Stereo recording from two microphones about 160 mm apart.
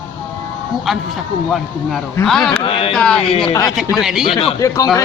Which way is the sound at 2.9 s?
5° left (ahead or behind).